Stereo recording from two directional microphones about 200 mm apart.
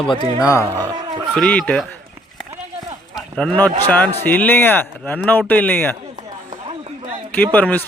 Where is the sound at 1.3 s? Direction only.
5° left (ahead or behind).